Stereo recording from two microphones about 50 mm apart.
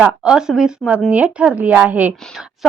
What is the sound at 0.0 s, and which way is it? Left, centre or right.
Speech, centre.